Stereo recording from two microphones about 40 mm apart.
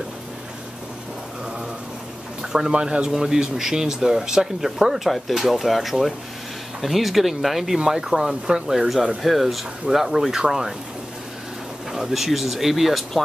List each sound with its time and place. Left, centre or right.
2.7 s speech: right; by 7.8 s centre
7.8 s speech: centre
8.7 s speech: centre
11.9 s speech: centre